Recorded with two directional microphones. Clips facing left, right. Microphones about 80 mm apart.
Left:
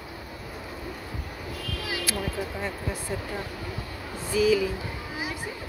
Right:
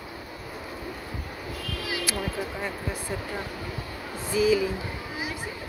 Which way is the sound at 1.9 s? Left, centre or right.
Centre.